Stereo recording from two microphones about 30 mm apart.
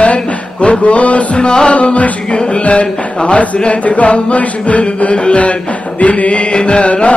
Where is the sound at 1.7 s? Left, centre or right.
Left.